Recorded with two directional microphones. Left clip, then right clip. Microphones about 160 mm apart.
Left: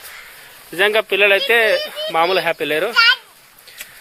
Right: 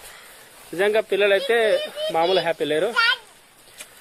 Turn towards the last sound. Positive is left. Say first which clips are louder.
# left 6 dB
turn(degrees=-15)  # may be behind; listen again after turning